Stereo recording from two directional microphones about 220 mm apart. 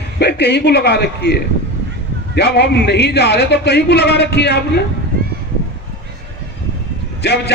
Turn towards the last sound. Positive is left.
turn(degrees=50)  # may be behind; listen again after turning